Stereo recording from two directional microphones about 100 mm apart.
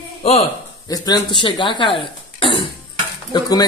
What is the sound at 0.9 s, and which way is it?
Speech, 40° left (ahead or behind).